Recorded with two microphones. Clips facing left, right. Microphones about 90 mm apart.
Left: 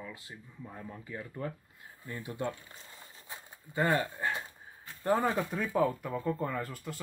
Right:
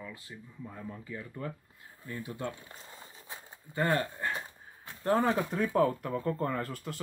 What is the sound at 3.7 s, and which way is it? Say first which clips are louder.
Speech: even; 10° left (ahead or behind).